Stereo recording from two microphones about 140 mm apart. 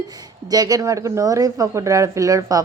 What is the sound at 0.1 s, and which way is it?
A woman's voice, 25° right (ahead or behind).